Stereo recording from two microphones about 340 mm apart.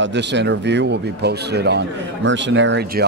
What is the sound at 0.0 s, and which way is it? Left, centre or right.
Speech, right.